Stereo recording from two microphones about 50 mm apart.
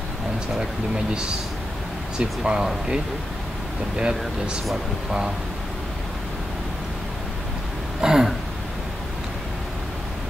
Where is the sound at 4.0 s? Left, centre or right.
Centre.